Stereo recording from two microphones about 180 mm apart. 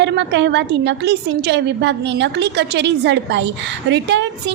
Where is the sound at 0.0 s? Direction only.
75° right (ahead or behind).